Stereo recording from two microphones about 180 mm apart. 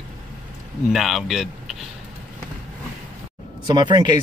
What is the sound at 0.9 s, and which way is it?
Speech, centre (ahead or behind).